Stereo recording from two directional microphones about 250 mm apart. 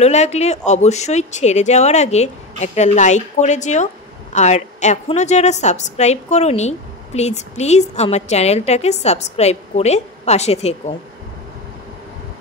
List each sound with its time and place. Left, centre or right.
0.0 s speech: left